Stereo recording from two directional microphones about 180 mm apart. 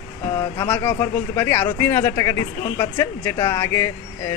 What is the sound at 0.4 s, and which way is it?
Speech, 10° left (ahead or behind).